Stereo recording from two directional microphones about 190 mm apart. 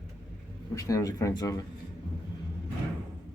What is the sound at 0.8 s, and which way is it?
Speech, 15° left (ahead or behind).